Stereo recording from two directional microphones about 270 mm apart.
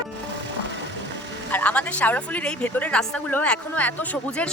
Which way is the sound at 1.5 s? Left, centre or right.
Centre.